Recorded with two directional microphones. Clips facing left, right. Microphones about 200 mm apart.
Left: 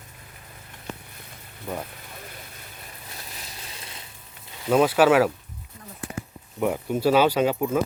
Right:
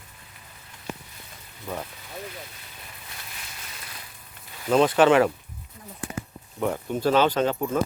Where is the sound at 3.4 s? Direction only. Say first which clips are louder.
Left 2 dB; 30° left (ahead or behind).